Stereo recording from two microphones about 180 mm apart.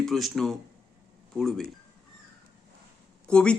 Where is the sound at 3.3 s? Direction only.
5° left (ahead or behind).